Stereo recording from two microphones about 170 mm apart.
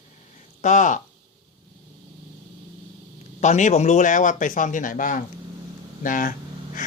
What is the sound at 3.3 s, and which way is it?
Speech, 45° left (ahead or behind).